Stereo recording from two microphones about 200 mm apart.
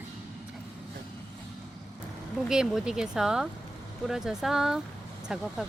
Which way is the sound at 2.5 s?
5° right (ahead or behind).